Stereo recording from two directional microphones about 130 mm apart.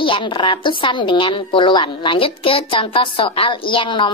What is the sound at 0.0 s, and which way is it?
A woman's voice, 40° left (ahead or behind).